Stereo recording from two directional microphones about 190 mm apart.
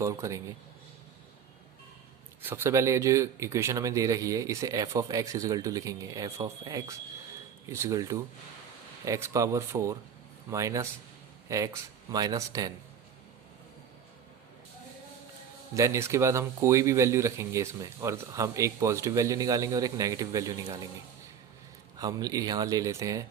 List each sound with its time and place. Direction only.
0.0 s speech: 15° right (ahead or behind)
2.4 s speech: 10° right (ahead or behind)
15.7 s speech: 15° right (ahead or behind)
21.9 s speech: 20° right (ahead or behind)